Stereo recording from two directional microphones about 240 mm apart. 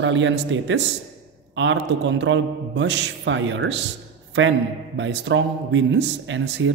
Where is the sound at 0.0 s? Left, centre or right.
Right.